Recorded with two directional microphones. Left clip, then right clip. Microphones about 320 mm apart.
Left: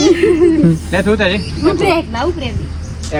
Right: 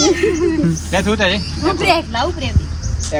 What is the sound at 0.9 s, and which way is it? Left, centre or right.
Speech, centre.